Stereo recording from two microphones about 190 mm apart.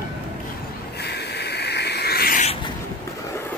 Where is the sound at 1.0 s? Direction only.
60° left (ahead or behind).